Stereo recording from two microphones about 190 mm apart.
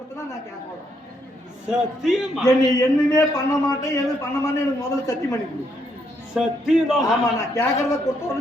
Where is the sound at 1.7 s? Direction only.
Centre (ahead or behind).